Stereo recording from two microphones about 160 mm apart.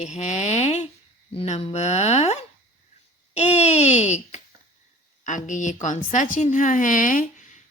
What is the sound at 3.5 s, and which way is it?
A woman's voice, 45° left (ahead or behind).